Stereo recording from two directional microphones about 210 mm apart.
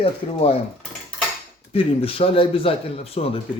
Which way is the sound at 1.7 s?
25° left (ahead or behind).